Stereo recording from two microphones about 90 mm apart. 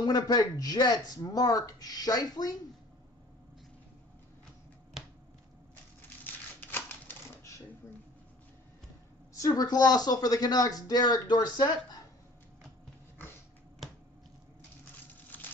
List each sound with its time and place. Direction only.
0.0 s speech: 45° left (ahead or behind)
6.2 s typewriter: 20° left (ahead or behind)
9.3 s speech: 45° left (ahead or behind)
15.3 s a sound: 20° left (ahead or behind)